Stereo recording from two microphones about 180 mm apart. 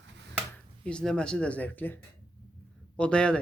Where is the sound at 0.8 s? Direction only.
5° left (ahead or behind).